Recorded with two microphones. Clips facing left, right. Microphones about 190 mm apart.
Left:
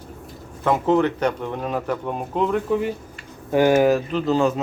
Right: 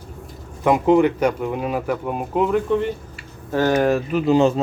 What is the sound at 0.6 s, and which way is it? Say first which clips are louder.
Speech: right 3 dB; 15° right (ahead or behind).